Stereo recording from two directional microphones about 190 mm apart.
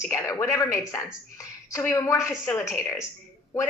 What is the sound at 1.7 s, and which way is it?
Speech, 15° left (ahead or behind).